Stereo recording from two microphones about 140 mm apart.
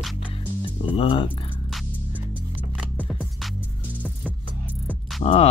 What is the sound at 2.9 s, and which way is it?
Music, 10° right (ahead or behind).